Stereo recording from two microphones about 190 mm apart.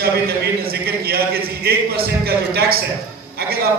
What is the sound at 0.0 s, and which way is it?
A man's voice, 55° right (ahead or behind).